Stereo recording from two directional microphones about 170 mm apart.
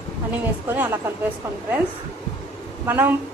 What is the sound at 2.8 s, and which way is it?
Speech, 10° right (ahead or behind).